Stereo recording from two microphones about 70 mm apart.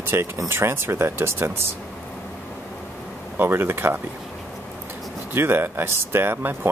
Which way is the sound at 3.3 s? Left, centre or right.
Right.